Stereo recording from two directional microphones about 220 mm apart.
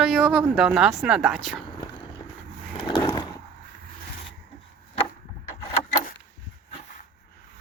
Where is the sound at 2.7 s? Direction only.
20° left (ahead or behind).